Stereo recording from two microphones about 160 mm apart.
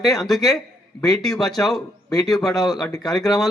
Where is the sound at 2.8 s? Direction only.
Centre (ahead or behind).